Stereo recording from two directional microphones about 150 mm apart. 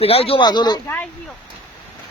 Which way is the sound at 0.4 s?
30° left (ahead or behind).